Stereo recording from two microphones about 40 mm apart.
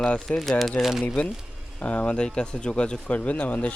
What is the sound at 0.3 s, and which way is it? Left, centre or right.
Speech, centre.